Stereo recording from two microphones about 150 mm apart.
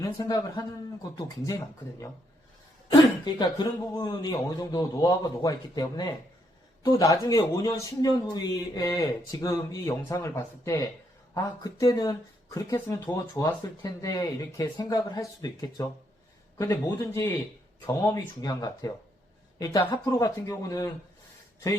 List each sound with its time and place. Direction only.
0.0 s speech: 20° left (ahead or behind)
16.8 s speech: 15° left (ahead or behind)